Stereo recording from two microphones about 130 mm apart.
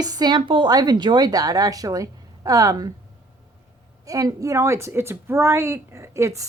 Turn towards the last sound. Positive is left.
turn(degrees=-25)  # may be behind; listen again after turning